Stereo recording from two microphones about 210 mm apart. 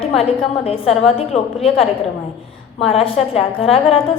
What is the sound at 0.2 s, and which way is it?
A woman's voice, 25° left (ahead or behind).